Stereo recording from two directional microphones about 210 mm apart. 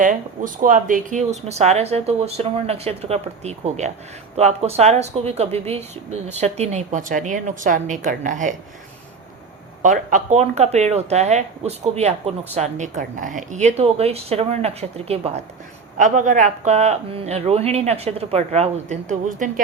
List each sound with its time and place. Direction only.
0.0 s speech: 40° right (ahead or behind)
9.8 s speech: 35° right (ahead or behind)